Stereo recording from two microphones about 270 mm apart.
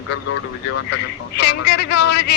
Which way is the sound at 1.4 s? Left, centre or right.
Left.